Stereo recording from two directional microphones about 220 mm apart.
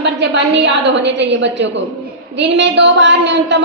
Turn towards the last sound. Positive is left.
turn(degrees=-55)  # may be behind; listen again after turning